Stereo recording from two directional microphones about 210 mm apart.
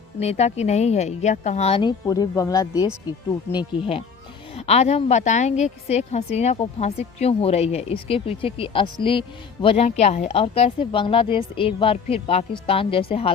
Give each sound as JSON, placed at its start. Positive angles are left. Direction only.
{"t": 0.2, "sound": "a woman's voice", "side_deg": 30}